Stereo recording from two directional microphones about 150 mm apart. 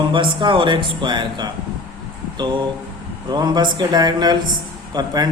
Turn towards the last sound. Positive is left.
turn(degrees=-25)  # may be behind; listen again after turning